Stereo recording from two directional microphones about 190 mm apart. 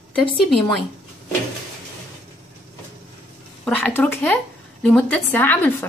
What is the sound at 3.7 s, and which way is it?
Speech, 10° left (ahead or behind).